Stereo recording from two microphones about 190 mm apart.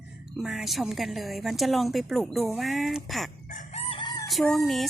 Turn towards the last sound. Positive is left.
turn(degrees=0)  # may be behind; listen again after turning